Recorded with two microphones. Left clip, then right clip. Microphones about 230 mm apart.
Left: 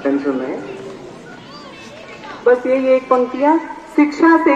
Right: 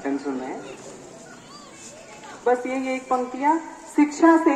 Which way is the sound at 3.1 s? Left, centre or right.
Right.